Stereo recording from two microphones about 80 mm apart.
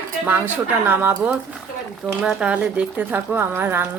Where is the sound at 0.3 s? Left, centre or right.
Right.